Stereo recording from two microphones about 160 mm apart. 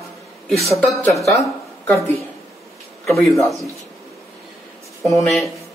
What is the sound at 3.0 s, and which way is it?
Speech, 20° left (ahead or behind).